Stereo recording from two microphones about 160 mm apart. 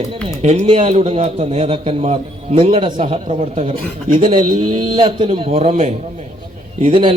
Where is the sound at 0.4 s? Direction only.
40° right (ahead or behind).